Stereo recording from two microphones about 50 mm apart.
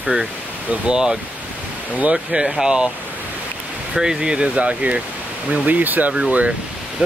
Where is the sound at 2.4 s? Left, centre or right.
Centre.